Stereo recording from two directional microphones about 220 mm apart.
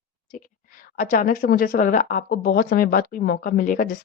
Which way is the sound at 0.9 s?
35° left (ahead or behind).